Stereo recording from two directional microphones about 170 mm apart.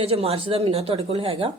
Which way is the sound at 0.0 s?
35° right (ahead or behind).